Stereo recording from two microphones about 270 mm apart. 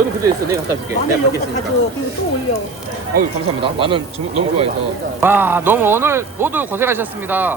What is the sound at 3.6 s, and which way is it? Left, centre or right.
Speech, centre.